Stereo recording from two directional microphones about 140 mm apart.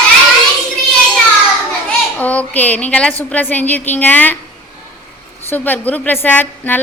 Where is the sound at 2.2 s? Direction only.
10° left (ahead or behind).